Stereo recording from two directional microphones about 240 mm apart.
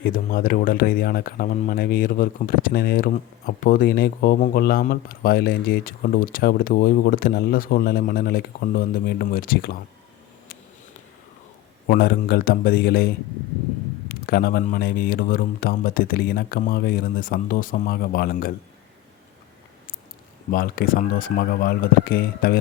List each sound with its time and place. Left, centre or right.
0.0 s speech: left
11.9 s speech: left
14.1 s speech: left
20.5 s speech: left